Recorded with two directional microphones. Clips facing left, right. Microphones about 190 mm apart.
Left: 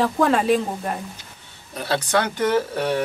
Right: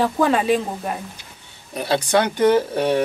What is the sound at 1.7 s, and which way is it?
Speech, 15° right (ahead or behind).